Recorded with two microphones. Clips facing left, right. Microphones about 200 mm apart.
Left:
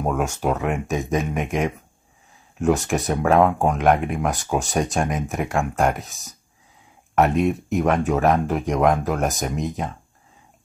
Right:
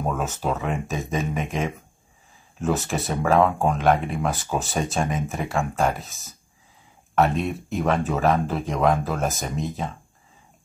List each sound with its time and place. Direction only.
0.0 s speech: 15° left (ahead or behind)
7.5 s speech: 15° left (ahead or behind)